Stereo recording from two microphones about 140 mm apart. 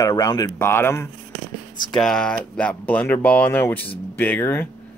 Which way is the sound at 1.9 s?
5° left (ahead or behind).